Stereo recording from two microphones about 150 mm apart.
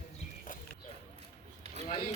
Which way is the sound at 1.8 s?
40° left (ahead or behind).